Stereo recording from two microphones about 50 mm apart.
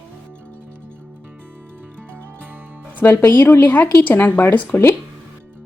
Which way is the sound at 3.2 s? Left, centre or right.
Left.